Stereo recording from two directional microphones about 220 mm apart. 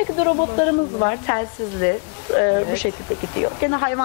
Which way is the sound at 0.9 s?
20° left (ahead or behind).